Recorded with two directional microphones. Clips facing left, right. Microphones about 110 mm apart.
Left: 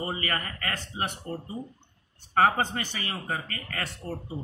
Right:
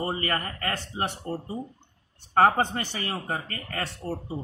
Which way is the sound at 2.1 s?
40° right (ahead or behind).